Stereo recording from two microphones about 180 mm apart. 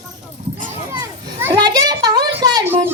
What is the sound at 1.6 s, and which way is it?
Speech, 25° right (ahead or behind).